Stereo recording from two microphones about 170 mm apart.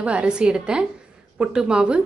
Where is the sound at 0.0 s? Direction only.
5° right (ahead or behind).